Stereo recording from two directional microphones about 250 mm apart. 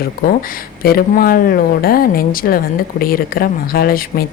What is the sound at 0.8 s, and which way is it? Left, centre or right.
A woman's voice, left.